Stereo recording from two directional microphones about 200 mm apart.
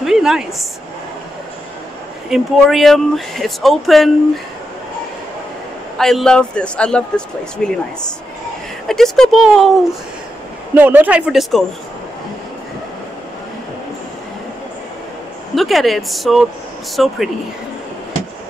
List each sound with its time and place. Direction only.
0.0 s a woman's voice: centre (ahead or behind)
2.2 s speech: centre (ahead or behind)
5.9 s speech: centre (ahead or behind)
8.8 s speech: centre (ahead or behind)
10.7 s speech: 10° right (ahead or behind)
15.5 s speech: centre (ahead or behind)